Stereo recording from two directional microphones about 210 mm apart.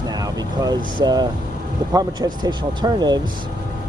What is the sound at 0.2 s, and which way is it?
Speech, 20° right (ahead or behind).